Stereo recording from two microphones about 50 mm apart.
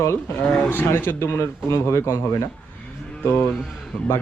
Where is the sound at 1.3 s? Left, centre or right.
Left.